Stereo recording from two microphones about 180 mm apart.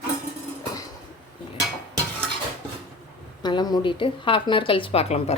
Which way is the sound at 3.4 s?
25° left (ahead or behind).